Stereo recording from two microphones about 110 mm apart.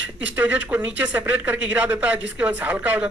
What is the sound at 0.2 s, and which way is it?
Speech, 15° right (ahead or behind).